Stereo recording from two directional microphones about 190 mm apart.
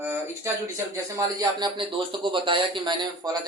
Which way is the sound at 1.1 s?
20° right (ahead or behind).